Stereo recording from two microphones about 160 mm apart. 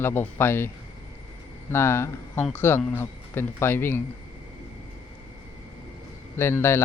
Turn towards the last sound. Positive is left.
turn(degrees=15)  # may be behind; listen again after turning